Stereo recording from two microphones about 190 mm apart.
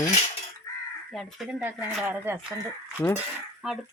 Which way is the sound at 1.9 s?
10° right (ahead or behind).